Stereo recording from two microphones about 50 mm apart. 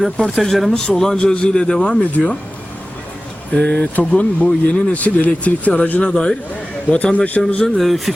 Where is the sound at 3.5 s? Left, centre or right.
Left.